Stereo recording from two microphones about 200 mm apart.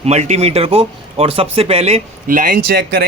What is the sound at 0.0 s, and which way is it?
Speech, 35° right (ahead or behind).